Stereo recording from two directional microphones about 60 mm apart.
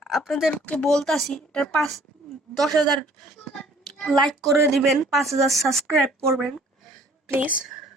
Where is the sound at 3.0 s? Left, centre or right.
Centre.